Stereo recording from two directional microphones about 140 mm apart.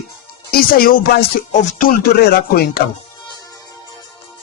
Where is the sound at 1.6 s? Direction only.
65° left (ahead or behind); by 2.8 s 90° left.